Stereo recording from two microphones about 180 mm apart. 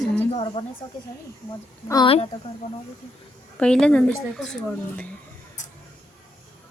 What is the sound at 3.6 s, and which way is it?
Speech, 5° left (ahead or behind).